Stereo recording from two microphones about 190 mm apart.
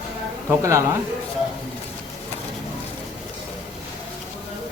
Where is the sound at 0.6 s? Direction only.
15° right (ahead or behind).